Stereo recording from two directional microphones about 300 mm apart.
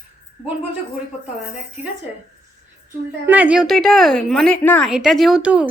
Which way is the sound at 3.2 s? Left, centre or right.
Centre.